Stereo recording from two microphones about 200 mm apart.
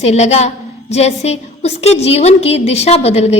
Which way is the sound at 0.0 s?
35° left (ahead or behind).